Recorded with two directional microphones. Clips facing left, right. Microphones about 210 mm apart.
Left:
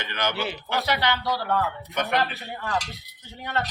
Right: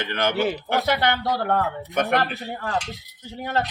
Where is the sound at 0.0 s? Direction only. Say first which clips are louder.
Right 6 dB; 50° right (ahead or behind).